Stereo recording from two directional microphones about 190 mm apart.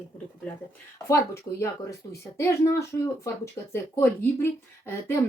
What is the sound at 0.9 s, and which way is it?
Speech, 15° left (ahead or behind).